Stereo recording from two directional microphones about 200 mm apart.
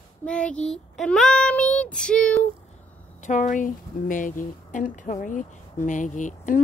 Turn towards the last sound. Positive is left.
turn(degrees=40)  # may be behind; listen again after turning